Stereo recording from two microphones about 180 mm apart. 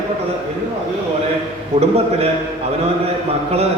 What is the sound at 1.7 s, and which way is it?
Speech, 35° right (ahead or behind).